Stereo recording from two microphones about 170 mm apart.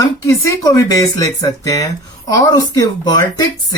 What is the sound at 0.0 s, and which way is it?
Speech, 20° left (ahead or behind).